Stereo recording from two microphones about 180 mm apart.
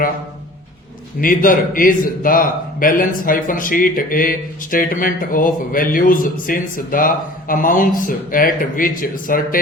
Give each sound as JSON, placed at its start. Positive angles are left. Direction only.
{"t": 1.2, "sound": "a man's voice", "side_deg": 50}